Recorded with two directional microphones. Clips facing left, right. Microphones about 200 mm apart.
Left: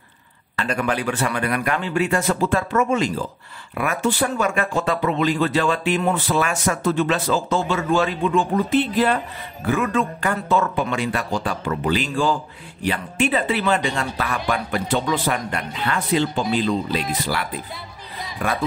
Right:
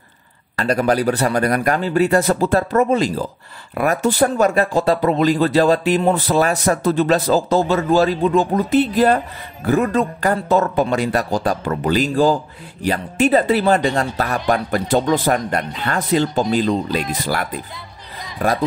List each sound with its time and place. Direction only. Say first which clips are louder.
0.6 s speech: right 6 dB; 40° right (ahead or behind)